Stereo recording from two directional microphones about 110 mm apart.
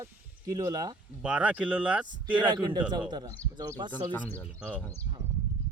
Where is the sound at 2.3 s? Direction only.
45° right (ahead or behind).